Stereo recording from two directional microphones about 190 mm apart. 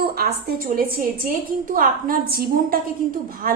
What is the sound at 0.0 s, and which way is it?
A woman's voice, 55° right (ahead or behind).